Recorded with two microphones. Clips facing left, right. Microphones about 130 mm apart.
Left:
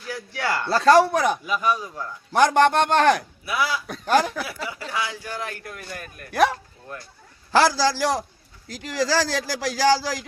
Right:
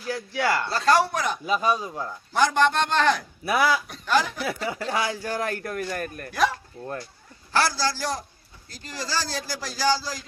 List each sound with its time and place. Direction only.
0.3 s a man's voice: 10° right (ahead or behind)
0.7 s a man's voice: 55° left (ahead or behind)
1.5 s speech: 25° right (ahead or behind)
2.3 s a man's voice: 60° left (ahead or behind)
3.4 s speech: 45° right (ahead or behind)
4.0 s speech: 50° left (ahead or behind)
4.4 s speech: 45° right (ahead or behind)
7.5 s speech: 90° left